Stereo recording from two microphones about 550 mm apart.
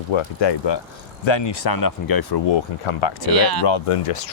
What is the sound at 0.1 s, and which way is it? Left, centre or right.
Speech, left.